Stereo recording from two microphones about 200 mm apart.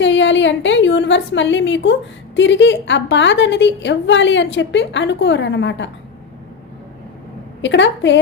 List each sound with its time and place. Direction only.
0.0 s a woman's voice: 65° left (ahead or behind)
7.6 s a woman's voice: 65° left (ahead or behind)